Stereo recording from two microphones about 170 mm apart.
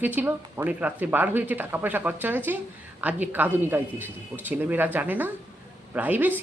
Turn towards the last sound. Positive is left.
turn(degrees=-10)  # may be behind; listen again after turning